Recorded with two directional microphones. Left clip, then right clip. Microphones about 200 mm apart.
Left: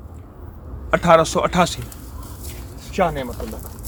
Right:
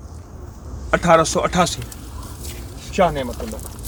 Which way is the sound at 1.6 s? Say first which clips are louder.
Even; 25° left (ahead or behind).